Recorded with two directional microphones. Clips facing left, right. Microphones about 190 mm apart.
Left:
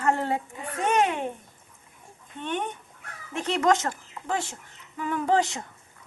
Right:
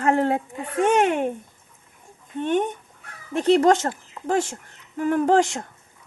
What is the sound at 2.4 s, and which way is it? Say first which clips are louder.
Speech: right 9 dB; 45° right (ahead or behind).